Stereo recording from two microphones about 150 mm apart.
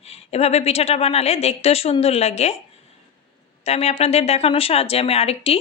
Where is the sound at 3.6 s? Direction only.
45° left (ahead or behind).